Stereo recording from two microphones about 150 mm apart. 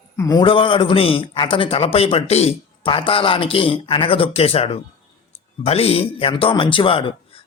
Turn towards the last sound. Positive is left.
turn(degrees=35)  # may be behind; listen again after turning